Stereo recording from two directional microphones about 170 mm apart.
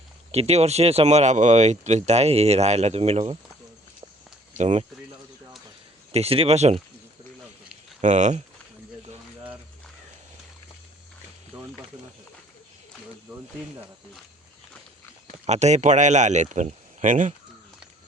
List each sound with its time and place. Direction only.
0.3 s speech: 40° right (ahead or behind)
4.5 s speech: 45° right (ahead or behind)
6.1 s speech: 35° right (ahead or behind)
8.0 s speech: 45° right (ahead or behind)
11.5 s a sound: 10° right (ahead or behind)
15.4 s speech: 40° right (ahead or behind)